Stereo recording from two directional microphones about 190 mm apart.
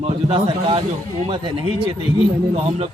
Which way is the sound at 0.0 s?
30° right (ahead or behind).